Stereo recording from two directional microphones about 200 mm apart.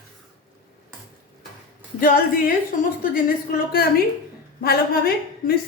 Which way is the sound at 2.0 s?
45° left (ahead or behind).